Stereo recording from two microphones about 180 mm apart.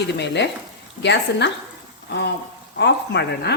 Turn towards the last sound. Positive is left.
turn(degrees=70)  # may be behind; listen again after turning